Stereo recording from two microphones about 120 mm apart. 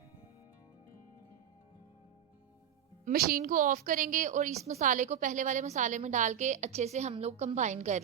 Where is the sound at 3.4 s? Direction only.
90° right.